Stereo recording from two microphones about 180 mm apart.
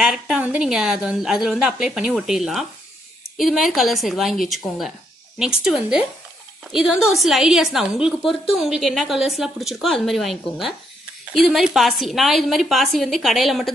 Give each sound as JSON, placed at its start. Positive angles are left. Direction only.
{"t": 0.0, "sound": "a woman's voice", "side_deg": -5}